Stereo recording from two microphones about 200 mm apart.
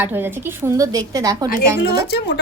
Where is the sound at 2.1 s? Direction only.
55° left (ahead or behind).